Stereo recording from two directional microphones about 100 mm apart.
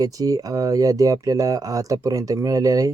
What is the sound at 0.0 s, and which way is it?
Speech, 40° right (ahead or behind).